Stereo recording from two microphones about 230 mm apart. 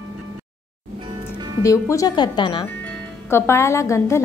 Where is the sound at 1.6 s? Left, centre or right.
Centre.